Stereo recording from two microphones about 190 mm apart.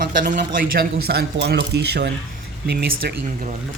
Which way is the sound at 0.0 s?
55° right (ahead or behind).